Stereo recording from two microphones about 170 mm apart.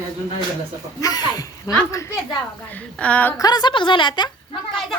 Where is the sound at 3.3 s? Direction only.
25° left (ahead or behind).